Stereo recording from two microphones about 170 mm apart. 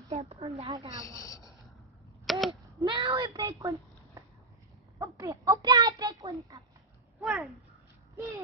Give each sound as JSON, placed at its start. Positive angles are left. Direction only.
{"t": 0.1, "sound": "a woman's voice", "side_deg": -35}
{"t": 1.0, "sound": "a man's voice", "side_deg": 20}
{"t": 2.2, "sound": "a sound", "side_deg": 0}
{"t": 2.8, "sound": "a child's voice", "side_deg": -30}
{"t": 7.2, "sound": "speech", "side_deg": 0}